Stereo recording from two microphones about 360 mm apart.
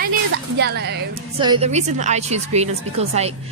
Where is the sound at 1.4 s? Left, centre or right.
Centre.